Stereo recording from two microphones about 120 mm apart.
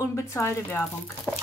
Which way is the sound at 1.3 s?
15° left (ahead or behind).